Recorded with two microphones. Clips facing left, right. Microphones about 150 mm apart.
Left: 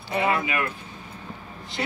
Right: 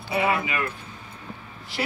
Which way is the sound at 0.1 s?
5° right (ahead or behind).